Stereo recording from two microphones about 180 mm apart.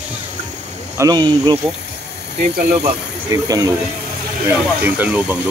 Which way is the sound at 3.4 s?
20° right (ahead or behind).